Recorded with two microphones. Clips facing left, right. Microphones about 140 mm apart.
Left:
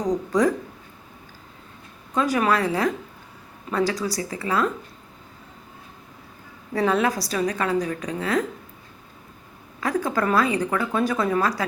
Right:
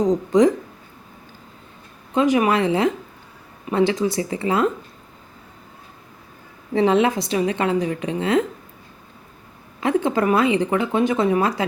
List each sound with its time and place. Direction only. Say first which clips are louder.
0.0 s speech: right 5 dB; 20° right (ahead or behind)
2.1 s speech: right 4 dB; 20° right (ahead or behind)
6.7 s speech: right 4 dB; 25° right (ahead or behind)
9.8 s speech: right 4 dB; 25° right (ahead or behind)